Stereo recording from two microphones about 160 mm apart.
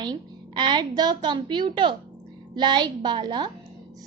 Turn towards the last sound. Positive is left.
turn(degrees=-30)  # may be behind; listen again after turning